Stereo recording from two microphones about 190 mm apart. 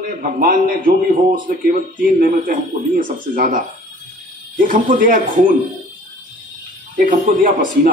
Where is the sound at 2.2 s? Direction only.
45° right (ahead or behind).